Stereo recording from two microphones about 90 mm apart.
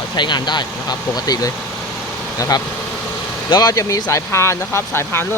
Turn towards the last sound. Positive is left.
turn(degrees=30)  # may be behind; listen again after turning